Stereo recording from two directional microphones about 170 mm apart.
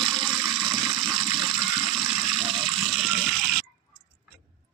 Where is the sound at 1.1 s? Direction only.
25° right (ahead or behind).